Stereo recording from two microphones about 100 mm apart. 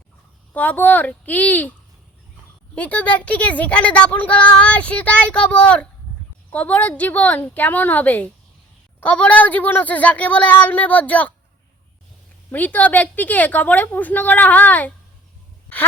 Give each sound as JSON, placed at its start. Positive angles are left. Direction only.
{"t": 0.5, "sound": "a woman's voice", "side_deg": 15}
{"t": 2.7, "sound": "a woman's voice", "side_deg": 15}
{"t": 12.5, "sound": "a woman's voice", "side_deg": 20}